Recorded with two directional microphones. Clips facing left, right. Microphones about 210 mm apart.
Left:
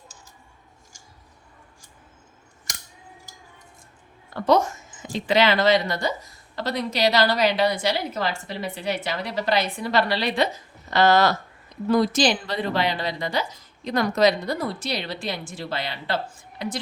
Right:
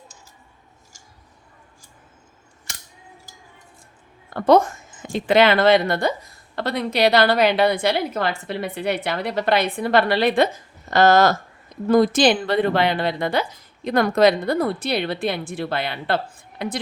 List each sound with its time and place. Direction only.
4.4 s speech: 55° right (ahead or behind)